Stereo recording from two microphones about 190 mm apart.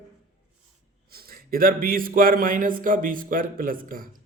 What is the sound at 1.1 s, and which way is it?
A man's voice, 50° right (ahead or behind).